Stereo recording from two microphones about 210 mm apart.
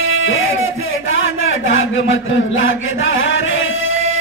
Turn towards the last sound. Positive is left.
turn(degrees=70)  # may be behind; listen again after turning